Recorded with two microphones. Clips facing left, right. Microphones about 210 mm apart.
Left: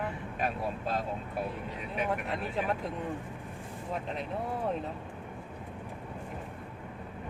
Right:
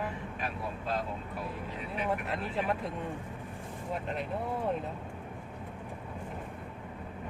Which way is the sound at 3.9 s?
Centre (ahead or behind).